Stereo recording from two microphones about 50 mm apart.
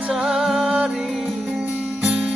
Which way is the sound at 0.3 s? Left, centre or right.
Centre.